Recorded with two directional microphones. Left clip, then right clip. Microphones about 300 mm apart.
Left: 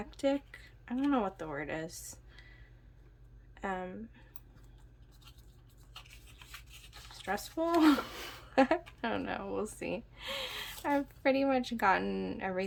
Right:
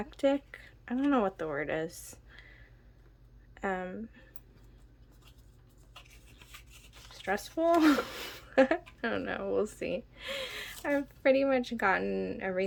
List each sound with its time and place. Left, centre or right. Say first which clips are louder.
0.0 s speech: right 4 dB; centre
7.1 s speech: right 3 dB; centre